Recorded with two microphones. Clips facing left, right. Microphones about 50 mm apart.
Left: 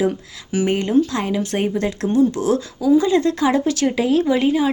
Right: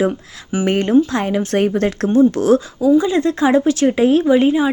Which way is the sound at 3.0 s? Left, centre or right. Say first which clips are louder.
Right 1 dB; right.